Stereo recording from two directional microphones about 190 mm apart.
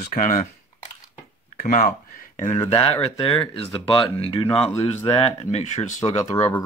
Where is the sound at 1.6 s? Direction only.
45° left (ahead or behind).